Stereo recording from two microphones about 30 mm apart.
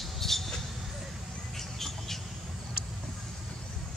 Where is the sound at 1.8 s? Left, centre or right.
Centre.